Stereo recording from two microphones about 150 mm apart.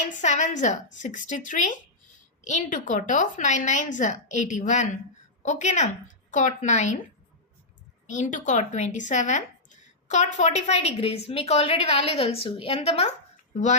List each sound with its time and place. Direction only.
0.2 s a woman's voice: 55° left (ahead or behind)
8.0 s speech: 55° left (ahead or behind)